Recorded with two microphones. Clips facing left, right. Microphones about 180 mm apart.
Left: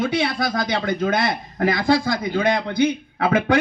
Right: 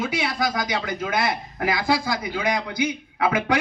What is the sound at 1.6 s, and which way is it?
A man's voice, 55° left (ahead or behind).